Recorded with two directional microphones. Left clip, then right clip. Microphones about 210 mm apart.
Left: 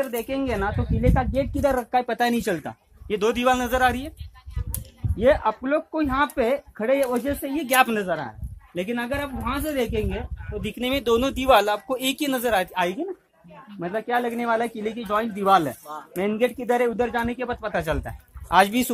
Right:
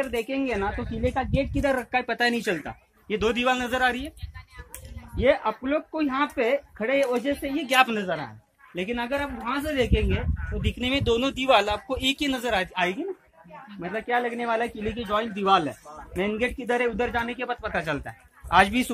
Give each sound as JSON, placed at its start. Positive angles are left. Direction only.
{"t": 0.0, "sound": "speech", "side_deg": 35}
{"t": 5.2, "sound": "speech", "side_deg": 40}
{"t": 7.6, "sound": "speech", "side_deg": 50}
{"t": 13.7, "sound": "speech", "side_deg": 30}